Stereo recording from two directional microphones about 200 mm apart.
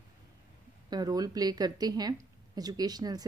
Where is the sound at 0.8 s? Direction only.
20° right (ahead or behind).